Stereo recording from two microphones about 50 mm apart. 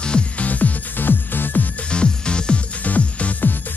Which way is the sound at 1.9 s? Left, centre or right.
Centre.